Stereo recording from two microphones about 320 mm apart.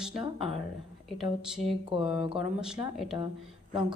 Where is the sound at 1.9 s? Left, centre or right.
Centre.